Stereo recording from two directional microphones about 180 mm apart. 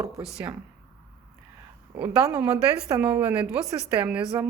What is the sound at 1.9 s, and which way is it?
A woman's voice, 5° right (ahead or behind).